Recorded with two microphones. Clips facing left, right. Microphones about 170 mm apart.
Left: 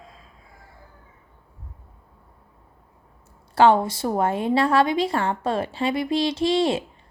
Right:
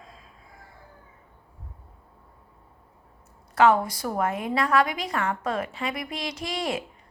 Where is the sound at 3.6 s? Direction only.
30° left (ahead or behind).